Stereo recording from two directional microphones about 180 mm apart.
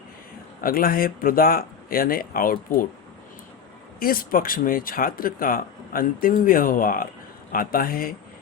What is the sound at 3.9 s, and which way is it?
Speech, 55° left (ahead or behind).